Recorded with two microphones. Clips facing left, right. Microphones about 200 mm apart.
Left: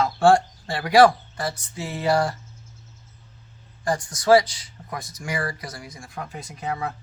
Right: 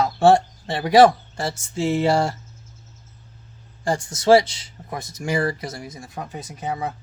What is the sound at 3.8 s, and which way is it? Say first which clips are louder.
Speech: right 3 dB; 25° right (ahead or behind).